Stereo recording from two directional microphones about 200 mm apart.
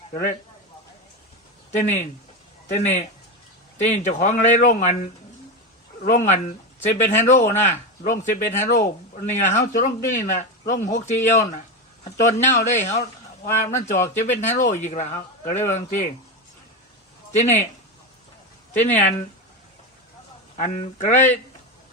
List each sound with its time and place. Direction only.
1.7 s a man's voice: 35° left (ahead or behind)
6.0 s a man's voice: 40° left (ahead or behind)
17.3 s a man's voice: 35° left (ahead or behind)
20.6 s a man's voice: 40° left (ahead or behind)